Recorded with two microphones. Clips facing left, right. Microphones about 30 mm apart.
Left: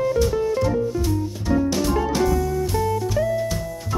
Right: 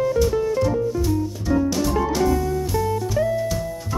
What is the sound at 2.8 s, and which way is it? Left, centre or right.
Music, centre.